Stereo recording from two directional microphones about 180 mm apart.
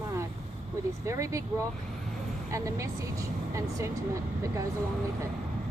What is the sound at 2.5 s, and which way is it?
Speech, 15° right (ahead or behind).